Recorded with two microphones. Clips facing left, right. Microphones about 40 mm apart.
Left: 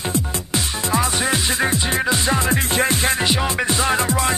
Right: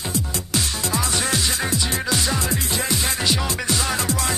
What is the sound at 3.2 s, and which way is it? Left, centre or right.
Music, left.